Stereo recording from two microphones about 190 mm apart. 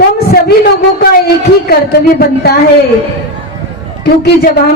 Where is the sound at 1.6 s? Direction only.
55° left (ahead or behind).